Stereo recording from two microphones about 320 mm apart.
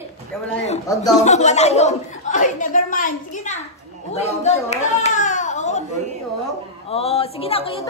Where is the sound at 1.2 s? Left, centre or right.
Left.